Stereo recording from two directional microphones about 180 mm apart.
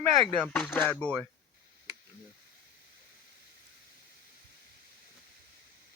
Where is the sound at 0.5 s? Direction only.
10° left (ahead or behind).